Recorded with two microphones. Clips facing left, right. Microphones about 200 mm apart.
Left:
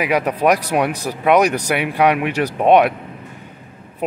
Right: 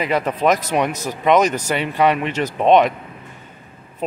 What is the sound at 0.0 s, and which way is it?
Speech, 10° left (ahead or behind).